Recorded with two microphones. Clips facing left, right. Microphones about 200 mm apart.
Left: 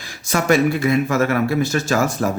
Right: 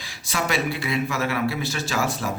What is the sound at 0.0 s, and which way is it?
Speech, 45° left (ahead or behind).